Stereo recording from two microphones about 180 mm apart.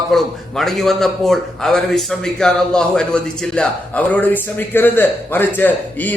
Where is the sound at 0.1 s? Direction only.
Centre (ahead or behind).